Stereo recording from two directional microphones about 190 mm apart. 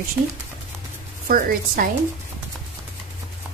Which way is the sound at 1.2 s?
50° right (ahead or behind).